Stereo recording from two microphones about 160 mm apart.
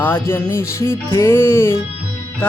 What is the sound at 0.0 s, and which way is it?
Music, 15° left (ahead or behind).